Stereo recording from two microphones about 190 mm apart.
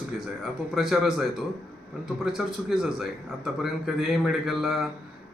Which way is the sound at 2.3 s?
5° right (ahead or behind).